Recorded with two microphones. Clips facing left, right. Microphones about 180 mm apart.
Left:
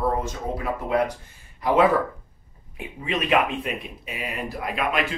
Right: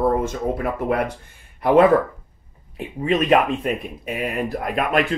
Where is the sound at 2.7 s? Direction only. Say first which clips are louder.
Right 7 dB; 45° right (ahead or behind).